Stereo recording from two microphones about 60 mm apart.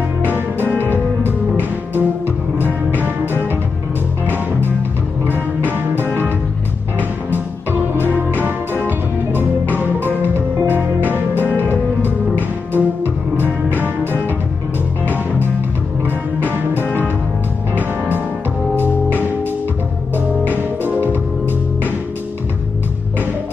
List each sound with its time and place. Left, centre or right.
0.6 s music: left
1.2 s music: right
6.0 s music: left
7.9 s music: right
9.7 s music: left
11.4 s music: left
12.0 s music: right
16.7 s music: left
17.7 s music: right
20.8 s music: left